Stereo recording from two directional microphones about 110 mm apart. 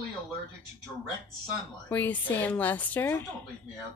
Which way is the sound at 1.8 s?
15° left (ahead or behind).